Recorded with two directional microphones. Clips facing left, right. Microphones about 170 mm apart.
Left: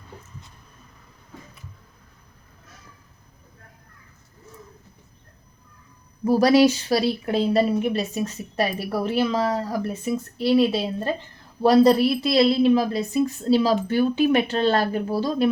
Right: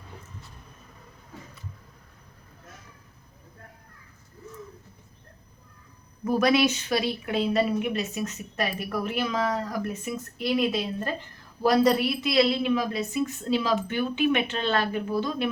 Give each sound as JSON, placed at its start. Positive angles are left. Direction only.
{"t": 6.2, "sound": "speech", "side_deg": 35}